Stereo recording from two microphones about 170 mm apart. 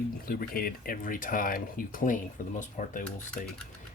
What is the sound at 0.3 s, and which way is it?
Speech, 60° left (ahead or behind).